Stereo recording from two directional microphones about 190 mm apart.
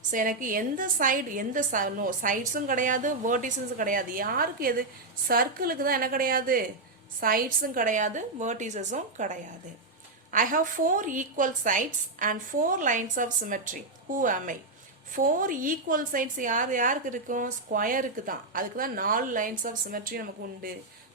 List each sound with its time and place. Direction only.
0.1 s a woman's voice: 45° right (ahead or behind)